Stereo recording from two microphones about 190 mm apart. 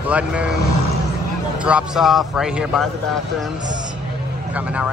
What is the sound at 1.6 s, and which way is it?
A man's voice, 5° right (ahead or behind).